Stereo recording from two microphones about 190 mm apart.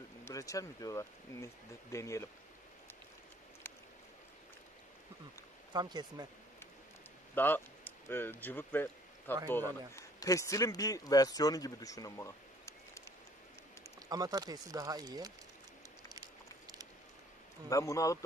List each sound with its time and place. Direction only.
0.2 s speech: 15° left (ahead or behind)
5.7 s speech: 20° right (ahead or behind)
7.3 s a man's voice: 10° left (ahead or behind)
14.0 s speech: 20° right (ahead or behind)
16.1 s a sound: 20° right (ahead or behind)
17.6 s speech: 15° left (ahead or behind)